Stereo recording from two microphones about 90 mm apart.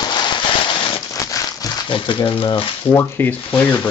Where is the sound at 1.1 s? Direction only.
40° left (ahead or behind).